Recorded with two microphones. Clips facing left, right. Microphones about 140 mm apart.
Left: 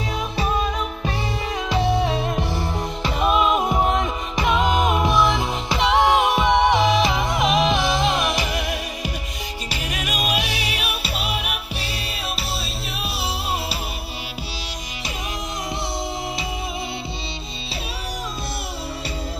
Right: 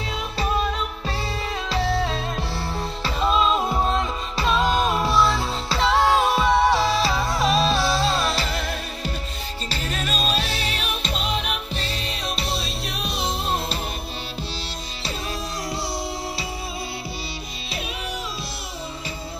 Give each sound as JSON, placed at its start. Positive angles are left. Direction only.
{"t": 0.4, "sound": "music", "side_deg": 15}